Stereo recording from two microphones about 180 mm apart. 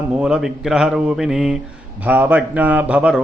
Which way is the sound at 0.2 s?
5° right (ahead or behind).